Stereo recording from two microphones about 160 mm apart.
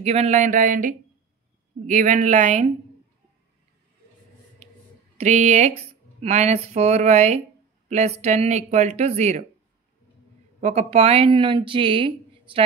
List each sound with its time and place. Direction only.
0.0 s speech: 40° right (ahead or behind)
5.1 s speech: 50° right (ahead or behind)
10.6 s speech: 40° right (ahead or behind)